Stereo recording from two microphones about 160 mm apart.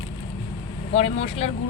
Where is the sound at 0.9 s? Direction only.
40° left (ahead or behind).